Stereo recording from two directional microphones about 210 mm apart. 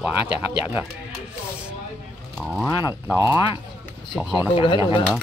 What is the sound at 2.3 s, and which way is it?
Speech, centre (ahead or behind).